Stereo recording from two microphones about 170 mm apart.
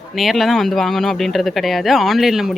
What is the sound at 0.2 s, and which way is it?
Speech, centre (ahead or behind).